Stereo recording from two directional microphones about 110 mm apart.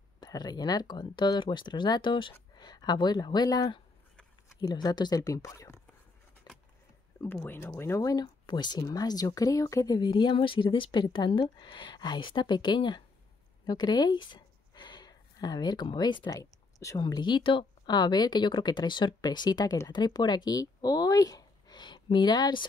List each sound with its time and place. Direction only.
0.2 s speech: 40° left (ahead or behind)
6.5 s vehicle: 40° left (ahead or behind)
7.2 s speech: 25° left (ahead or behind); by 16.3 s 45° left (ahead or behind)
16.3 s speech: 30° left (ahead or behind)